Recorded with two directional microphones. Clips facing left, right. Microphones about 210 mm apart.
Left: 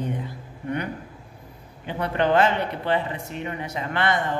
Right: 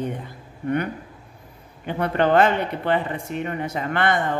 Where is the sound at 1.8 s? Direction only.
50° right (ahead or behind).